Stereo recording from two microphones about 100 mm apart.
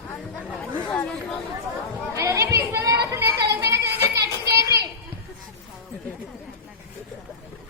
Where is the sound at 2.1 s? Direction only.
30° right (ahead or behind).